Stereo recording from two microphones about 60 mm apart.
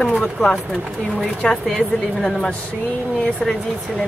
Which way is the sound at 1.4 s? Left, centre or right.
Centre.